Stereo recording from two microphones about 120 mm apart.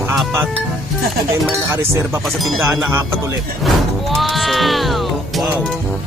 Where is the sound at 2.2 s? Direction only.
Centre (ahead or behind).